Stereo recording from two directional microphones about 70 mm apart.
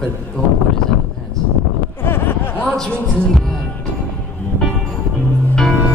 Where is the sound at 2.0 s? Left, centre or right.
Left.